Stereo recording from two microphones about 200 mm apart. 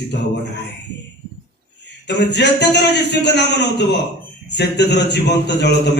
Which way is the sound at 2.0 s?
60° left (ahead or behind).